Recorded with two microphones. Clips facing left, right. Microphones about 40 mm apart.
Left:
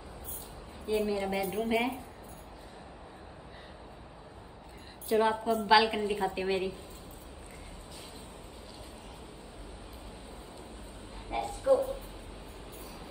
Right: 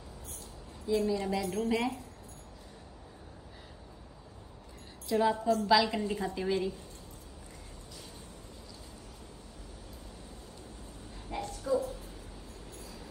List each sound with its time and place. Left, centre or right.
0.8 s a woman's voice: left
5.0 s a woman's voice: left
11.2 s a sound: left
12.7 s vehicle: left